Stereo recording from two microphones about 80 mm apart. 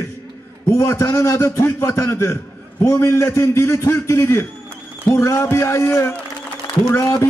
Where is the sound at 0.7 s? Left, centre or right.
Left.